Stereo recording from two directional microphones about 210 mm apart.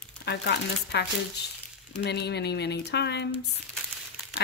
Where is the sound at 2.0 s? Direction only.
50° left (ahead or behind).